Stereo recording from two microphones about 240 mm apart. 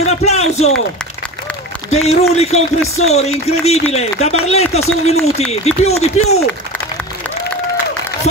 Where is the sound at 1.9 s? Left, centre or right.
Left.